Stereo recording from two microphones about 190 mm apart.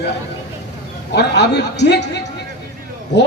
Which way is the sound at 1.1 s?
60° left (ahead or behind).